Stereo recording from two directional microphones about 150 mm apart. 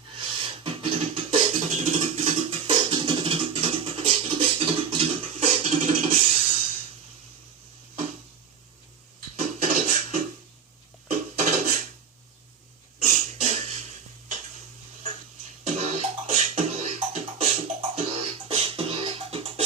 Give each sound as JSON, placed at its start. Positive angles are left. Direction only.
{"t": 0.2, "sound": "beatboxing", "side_deg": -35}
{"t": 9.3, "sound": "music", "side_deg": -55}
{"t": 11.1, "sound": "dishes", "side_deg": -55}
{"t": 13.1, "sound": "a sound", "side_deg": -45}
{"t": 15.6, "sound": "music", "side_deg": -45}
{"t": 16.3, "sound": "beatboxing", "side_deg": -45}